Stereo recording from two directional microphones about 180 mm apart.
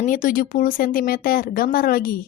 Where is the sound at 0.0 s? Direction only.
50° left (ahead or behind).